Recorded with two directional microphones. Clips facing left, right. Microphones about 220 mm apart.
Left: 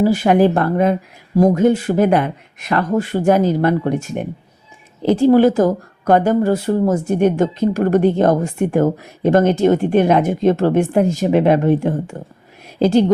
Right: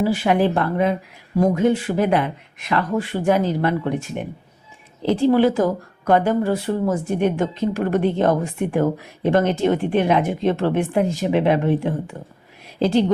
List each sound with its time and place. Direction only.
0.0 s speech: 40° left (ahead or behind)